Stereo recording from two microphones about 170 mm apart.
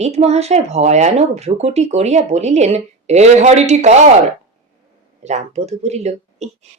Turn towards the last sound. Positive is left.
turn(degrees=-40)  # may be behind; listen again after turning